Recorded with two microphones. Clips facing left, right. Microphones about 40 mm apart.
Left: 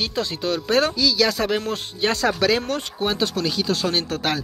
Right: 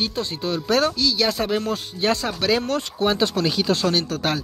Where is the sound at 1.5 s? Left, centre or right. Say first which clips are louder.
Even; left.